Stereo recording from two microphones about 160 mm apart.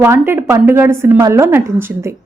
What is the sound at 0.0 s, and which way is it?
A woman's voice, 15° right (ahead or behind).